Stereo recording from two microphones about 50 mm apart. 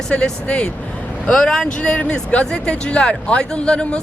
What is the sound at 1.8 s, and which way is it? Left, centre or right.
Speech, left.